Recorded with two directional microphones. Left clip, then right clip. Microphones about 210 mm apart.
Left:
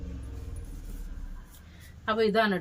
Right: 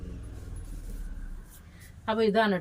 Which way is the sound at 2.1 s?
15° left (ahead or behind).